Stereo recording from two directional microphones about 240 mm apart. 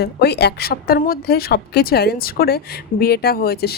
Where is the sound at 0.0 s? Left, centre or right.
Left.